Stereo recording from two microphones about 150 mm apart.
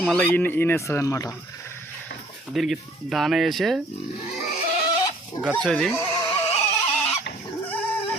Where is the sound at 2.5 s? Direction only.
Centre (ahead or behind).